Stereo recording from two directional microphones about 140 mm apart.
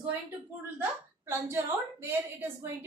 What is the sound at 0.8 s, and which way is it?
A woman's voice, 15° right (ahead or behind).